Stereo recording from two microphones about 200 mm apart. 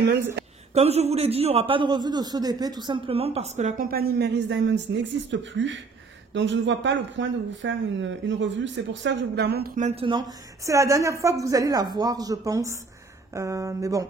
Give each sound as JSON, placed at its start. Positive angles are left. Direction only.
{"t": 0.7, "sound": "a man's voice", "side_deg": -30}
{"t": 9.8, "sound": "a woman's voice", "side_deg": -30}